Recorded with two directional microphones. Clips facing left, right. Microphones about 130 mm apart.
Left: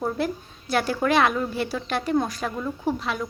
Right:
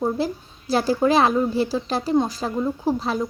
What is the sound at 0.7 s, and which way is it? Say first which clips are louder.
Speech: right 4 dB; 30° right (ahead or behind).